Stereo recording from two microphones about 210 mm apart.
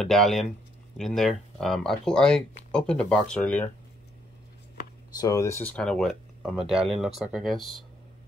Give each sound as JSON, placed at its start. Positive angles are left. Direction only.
{"t": 0.0, "sound": "speech", "side_deg": 0}
{"t": 5.1, "sound": "speech", "side_deg": 15}